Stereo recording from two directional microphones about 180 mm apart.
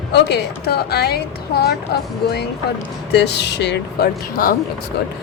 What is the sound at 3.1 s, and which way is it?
A woman's voice, 70° left (ahead or behind).